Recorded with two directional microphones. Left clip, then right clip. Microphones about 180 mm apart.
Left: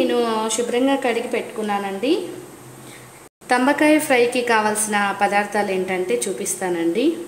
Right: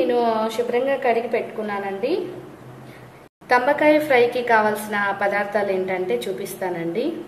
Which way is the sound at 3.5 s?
45° left (ahead or behind).